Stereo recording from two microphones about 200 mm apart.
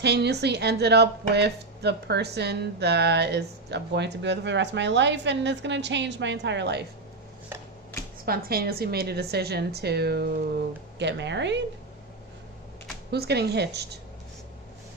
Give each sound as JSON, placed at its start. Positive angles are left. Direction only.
{"t": 0.0, "sound": "speech", "side_deg": -55}
{"t": 8.2, "sound": "a woman's voice", "side_deg": -50}
{"t": 13.1, "sound": "speech", "side_deg": -55}